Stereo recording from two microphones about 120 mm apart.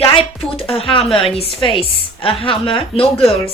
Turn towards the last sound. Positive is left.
turn(degrees=50)  # may be behind; listen again after turning